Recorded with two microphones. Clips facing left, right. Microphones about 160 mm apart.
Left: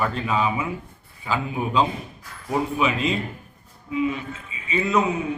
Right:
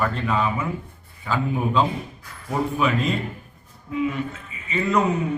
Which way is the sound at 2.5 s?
10° left (ahead or behind).